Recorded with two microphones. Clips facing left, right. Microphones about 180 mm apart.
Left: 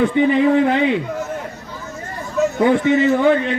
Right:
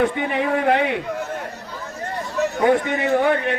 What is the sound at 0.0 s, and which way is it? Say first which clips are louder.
Speech: left 6 dB; 65° right (ahead or behind).